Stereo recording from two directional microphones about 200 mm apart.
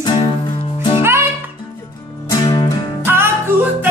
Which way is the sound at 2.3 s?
20° left (ahead or behind).